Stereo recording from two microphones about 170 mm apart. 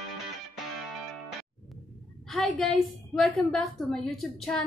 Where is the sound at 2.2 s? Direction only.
Centre (ahead or behind).